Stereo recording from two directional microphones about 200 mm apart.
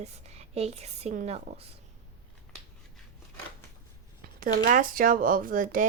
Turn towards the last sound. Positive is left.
turn(degrees=-40)  # may be behind; listen again after turning